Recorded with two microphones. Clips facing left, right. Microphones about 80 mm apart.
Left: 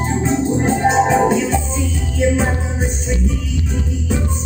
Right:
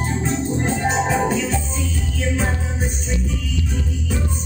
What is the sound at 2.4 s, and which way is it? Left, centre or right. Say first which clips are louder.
Music: left 4 dB; left.